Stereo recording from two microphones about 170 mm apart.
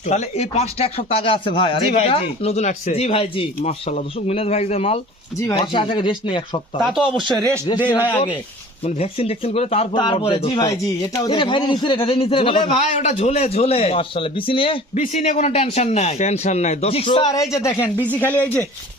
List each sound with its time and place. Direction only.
0.1 s a man's voice: 40° left (ahead or behind)
5.4 s speech: 20° left (ahead or behind)
5.7 s speech: 30° left (ahead or behind)
6.8 s speech: centre (ahead or behind)
7.2 s a man's voice: 25° right (ahead or behind)
7.7 s speech: 25° left (ahead or behind)
8.8 s a man's voice: 35° left (ahead or behind); by 18.6 s 10° left (ahead or behind)